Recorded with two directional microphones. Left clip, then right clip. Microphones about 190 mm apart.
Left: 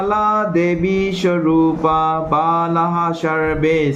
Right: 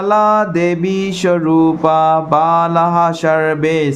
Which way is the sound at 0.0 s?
40° right (ahead or behind).